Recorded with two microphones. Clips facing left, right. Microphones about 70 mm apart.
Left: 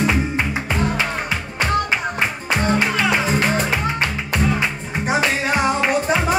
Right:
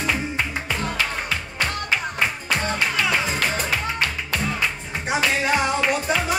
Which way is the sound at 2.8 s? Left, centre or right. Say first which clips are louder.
Left 4 dB; left.